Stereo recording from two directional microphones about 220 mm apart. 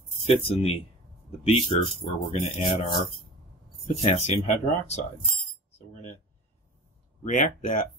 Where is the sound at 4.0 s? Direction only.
30° left (ahead or behind).